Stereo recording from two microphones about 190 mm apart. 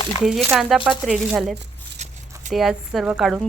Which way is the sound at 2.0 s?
35° right (ahead or behind).